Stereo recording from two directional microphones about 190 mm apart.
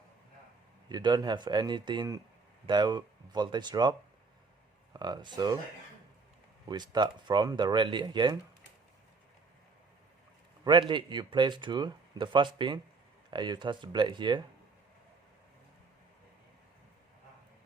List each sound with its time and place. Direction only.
0.9 s speech: 20° right (ahead or behind)
4.9 s speech: 20° right (ahead or behind)
6.7 s speech: 20° right (ahead or behind)
10.6 s speech: 25° right (ahead or behind)